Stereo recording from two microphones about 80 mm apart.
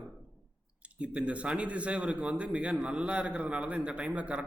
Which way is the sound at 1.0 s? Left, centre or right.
Centre.